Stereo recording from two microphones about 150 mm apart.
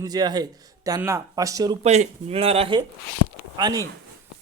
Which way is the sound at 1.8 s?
45° right (ahead or behind).